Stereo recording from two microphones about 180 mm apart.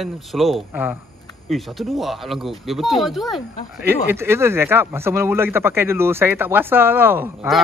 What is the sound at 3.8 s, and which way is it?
Speech, 10° right (ahead or behind).